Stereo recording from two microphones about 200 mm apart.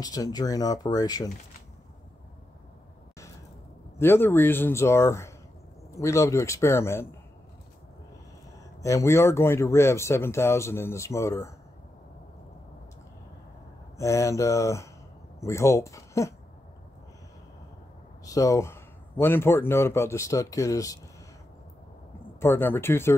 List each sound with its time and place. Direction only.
0.0 s speech: 20° left (ahead or behind)
4.0 s speech: 10° left (ahead or behind)
8.8 s speech: 15° left (ahead or behind)
13.9 s speech: 15° left (ahead or behind)
18.2 s a man's voice: 15° left (ahead or behind)
22.4 s speech: 10° left (ahead or behind)